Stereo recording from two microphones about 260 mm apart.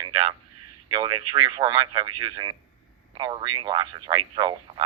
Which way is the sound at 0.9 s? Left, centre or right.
Centre.